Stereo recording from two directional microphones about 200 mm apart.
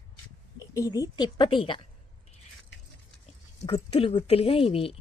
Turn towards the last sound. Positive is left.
turn(degrees=30)  # may be behind; listen again after turning